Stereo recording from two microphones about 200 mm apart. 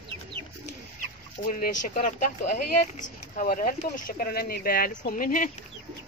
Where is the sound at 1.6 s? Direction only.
35° left (ahead or behind).